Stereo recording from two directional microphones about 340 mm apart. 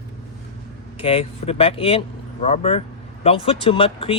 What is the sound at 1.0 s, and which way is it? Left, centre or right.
Speech, centre.